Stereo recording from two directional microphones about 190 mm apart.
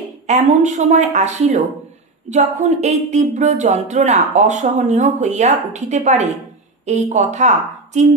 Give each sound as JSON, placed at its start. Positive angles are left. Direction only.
{"t": 0.3, "sound": "speech", "side_deg": -35}